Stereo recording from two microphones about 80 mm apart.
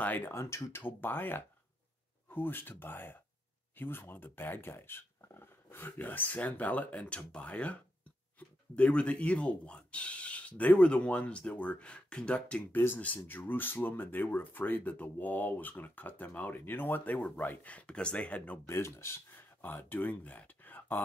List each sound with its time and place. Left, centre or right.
0.0 s speech: left
12.7 s speech: left
18.7 s speech: left